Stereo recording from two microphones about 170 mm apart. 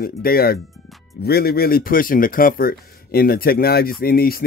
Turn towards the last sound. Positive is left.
turn(degrees=60)  # may be behind; listen again after turning